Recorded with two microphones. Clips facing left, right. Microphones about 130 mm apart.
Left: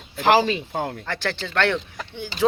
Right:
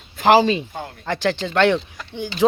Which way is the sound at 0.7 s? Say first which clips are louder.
Left 5 dB; 60° left (ahead or behind).